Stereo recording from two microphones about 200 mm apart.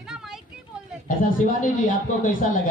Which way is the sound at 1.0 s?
40° left (ahead or behind).